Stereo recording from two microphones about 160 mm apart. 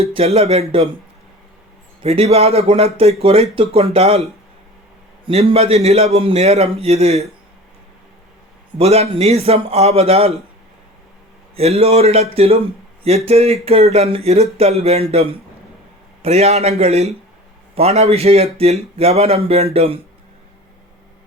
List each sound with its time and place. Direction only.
0.0 s speech: 40° right (ahead or behind)
2.0 s speech: 40° right (ahead or behind)
8.8 s speech: 40° right (ahead or behind)
11.5 s speech: 40° right (ahead or behind)